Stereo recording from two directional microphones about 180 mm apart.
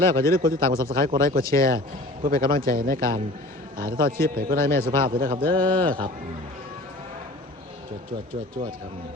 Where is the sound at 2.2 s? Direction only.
50° right (ahead or behind).